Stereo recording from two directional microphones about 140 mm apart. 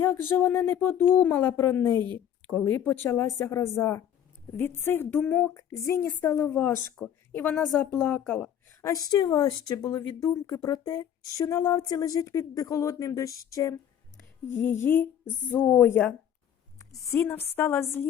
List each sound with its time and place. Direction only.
0.0 s speech: 15° left (ahead or behind)
7.9 s speech: 15° left (ahead or behind)
8.8 s speech: 25° left (ahead or behind)